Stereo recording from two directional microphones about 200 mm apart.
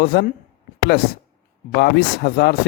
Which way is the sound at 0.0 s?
55° left (ahead or behind).